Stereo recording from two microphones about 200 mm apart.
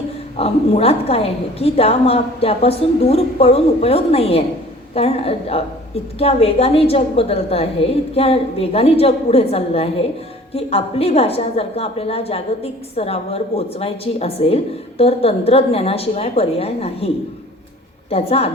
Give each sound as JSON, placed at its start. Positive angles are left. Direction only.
{"t": 0.3, "sound": "a woman's voice", "side_deg": 30}
{"t": 18.1, "sound": "a woman's voice", "side_deg": 30}